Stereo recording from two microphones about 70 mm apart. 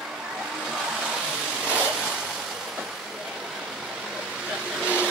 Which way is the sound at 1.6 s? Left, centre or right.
Centre.